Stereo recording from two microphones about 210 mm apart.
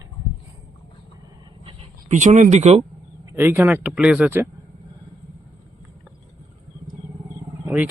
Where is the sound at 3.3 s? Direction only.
10° right (ahead or behind).